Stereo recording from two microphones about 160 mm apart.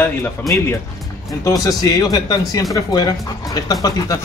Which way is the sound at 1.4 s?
20° left (ahead or behind).